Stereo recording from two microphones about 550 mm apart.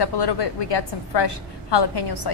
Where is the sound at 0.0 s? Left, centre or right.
Left.